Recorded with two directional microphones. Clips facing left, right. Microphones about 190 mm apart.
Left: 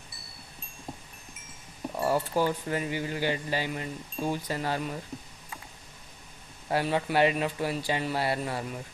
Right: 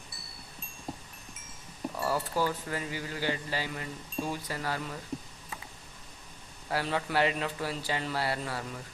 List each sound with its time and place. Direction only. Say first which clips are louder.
0.9 s livestock: right 1 dB; centre (ahead or behind)
2.0 s speech: left 4 dB; 20° left (ahead or behind)
6.7 s speech: left 4 dB; 20° left (ahead or behind)